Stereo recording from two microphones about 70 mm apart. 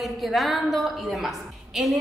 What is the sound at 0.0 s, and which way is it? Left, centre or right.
A woman's voice, centre.